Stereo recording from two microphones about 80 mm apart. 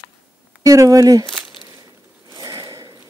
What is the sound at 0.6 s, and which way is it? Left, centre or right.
Speech, right.